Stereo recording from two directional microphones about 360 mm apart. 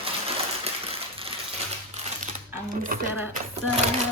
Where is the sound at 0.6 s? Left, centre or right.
Centre.